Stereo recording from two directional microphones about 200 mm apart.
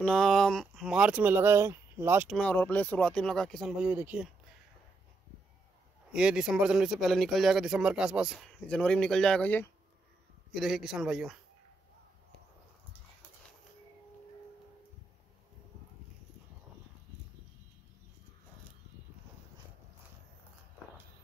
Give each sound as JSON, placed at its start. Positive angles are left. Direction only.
{"t": 0.0, "sound": "speech", "side_deg": 0}
{"t": 2.2, "sound": "speech", "side_deg": 5}
{"t": 6.1, "sound": "speech", "side_deg": -5}